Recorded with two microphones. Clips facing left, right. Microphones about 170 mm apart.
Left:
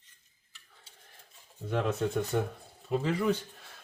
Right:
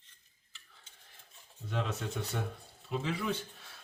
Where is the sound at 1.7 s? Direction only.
55° left (ahead or behind).